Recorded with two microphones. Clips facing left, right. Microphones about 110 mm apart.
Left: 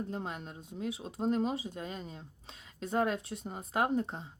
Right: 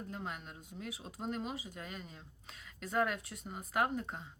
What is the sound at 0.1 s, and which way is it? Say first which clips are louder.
Speech: left 4 dB; 30° left (ahead or behind).